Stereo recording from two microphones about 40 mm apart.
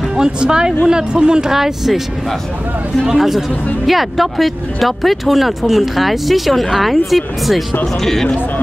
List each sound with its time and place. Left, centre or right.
0.2 s speech: centre
1.5 s speech: centre
3.2 s speech: centre
7.8 s speech: centre